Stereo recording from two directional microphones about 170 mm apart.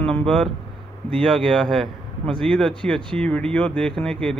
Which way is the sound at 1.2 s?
5° left (ahead or behind).